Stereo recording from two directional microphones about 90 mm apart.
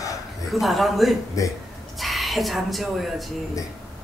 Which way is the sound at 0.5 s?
Centre (ahead or behind).